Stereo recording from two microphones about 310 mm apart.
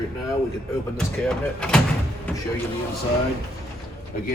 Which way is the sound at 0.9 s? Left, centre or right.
Centre.